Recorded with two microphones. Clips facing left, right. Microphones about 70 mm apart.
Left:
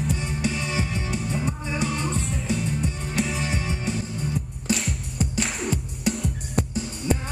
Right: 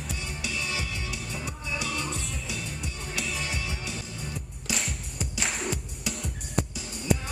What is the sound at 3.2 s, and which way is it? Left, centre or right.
Music, left.